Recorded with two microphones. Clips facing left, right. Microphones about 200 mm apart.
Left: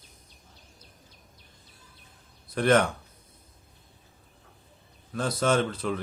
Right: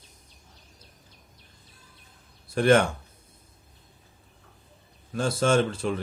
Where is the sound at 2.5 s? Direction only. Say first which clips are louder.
Right 2 dB; 30° right (ahead or behind).